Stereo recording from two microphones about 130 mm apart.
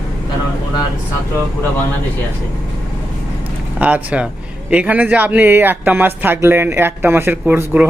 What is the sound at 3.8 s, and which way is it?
Speech, 10° right (ahead or behind).